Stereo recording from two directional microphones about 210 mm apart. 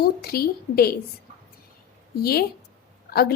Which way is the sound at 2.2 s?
45° left (ahead or behind).